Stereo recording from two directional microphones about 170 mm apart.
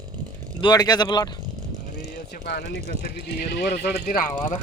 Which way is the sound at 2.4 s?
70° left (ahead or behind).